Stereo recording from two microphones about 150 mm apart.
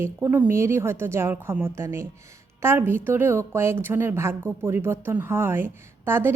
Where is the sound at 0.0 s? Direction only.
15° right (ahead or behind).